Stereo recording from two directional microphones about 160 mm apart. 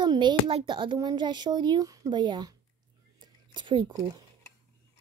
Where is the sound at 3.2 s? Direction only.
30° right (ahead or behind).